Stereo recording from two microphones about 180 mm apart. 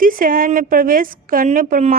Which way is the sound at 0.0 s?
50° right (ahead or behind).